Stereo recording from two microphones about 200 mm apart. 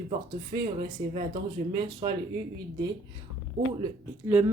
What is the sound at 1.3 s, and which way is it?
Speech, 20° right (ahead or behind).